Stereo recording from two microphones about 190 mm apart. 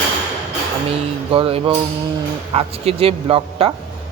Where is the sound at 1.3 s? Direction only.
30° right (ahead or behind).